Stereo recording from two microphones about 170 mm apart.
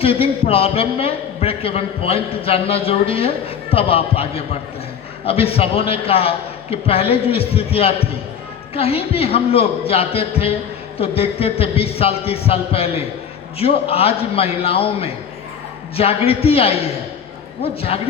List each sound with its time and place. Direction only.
0.0 s a man's voice: 35° left (ahead or behind)